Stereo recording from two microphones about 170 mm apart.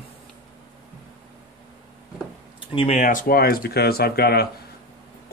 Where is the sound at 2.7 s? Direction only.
30° left (ahead or behind).